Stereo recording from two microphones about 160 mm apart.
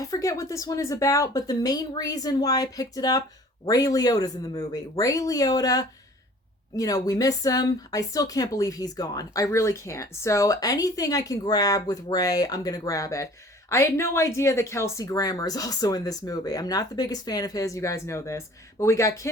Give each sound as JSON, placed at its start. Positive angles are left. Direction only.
{"t": 0.0, "sound": "speech", "side_deg": 20}